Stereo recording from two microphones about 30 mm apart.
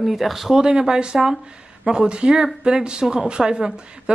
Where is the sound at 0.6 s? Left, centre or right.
Right.